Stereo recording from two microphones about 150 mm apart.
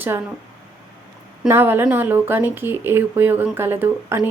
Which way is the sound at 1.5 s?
15° right (ahead or behind).